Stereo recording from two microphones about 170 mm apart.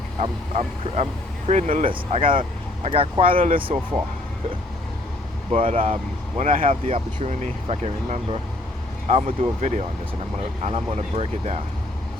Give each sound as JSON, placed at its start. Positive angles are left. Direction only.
{"t": 0.2, "sound": "speech", "side_deg": -40}
{"t": 1.9, "sound": "speech", "side_deg": -30}
{"t": 5.5, "sound": "speech", "side_deg": -35}